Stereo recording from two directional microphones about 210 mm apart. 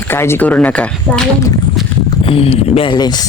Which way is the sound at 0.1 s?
10° left (ahead or behind).